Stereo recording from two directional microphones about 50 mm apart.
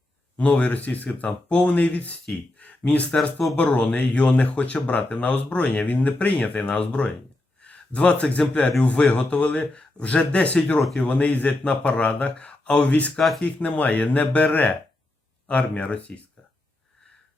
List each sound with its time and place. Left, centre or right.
0.3 s speech: left